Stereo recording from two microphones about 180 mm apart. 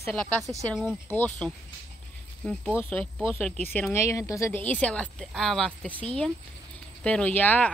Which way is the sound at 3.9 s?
15° left (ahead or behind).